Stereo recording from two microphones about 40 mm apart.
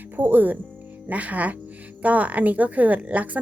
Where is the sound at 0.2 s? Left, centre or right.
Right.